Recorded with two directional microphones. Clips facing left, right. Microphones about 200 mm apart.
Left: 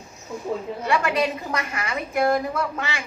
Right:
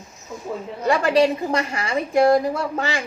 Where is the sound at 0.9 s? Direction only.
30° right (ahead or behind).